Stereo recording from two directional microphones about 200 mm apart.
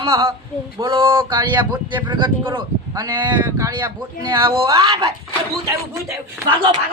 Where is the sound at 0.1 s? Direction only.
15° right (ahead or behind).